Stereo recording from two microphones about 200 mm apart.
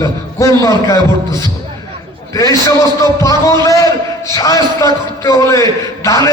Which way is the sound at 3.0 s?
15° left (ahead or behind).